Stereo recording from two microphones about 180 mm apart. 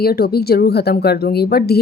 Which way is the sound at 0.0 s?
60° left (ahead or behind).